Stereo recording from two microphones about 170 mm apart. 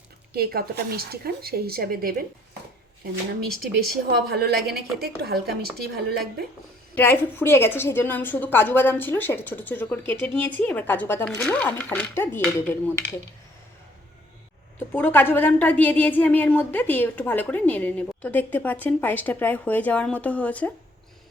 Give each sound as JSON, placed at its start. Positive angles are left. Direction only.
{"t": 0.3, "sound": "speech", "side_deg": -65}
{"t": 3.4, "sound": "a woman's voice", "side_deg": -65}
{"t": 6.9, "sound": "a woman's voice", "side_deg": 10}
{"t": 14.8, "sound": "a woman's voice", "side_deg": 10}